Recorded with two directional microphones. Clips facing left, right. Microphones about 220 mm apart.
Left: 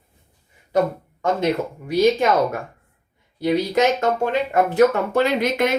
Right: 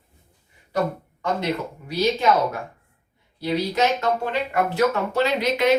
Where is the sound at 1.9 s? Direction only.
50° left (ahead or behind).